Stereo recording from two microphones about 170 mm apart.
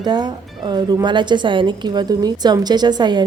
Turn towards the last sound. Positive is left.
turn(degrees=-25)  # may be behind; listen again after turning